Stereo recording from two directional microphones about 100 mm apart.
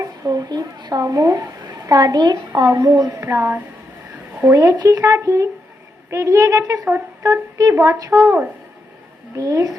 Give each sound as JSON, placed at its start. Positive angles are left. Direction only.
{"t": 0.0, "sound": "a woman's voice", "side_deg": -35}
{"t": 9.3, "sound": "speech", "side_deg": -35}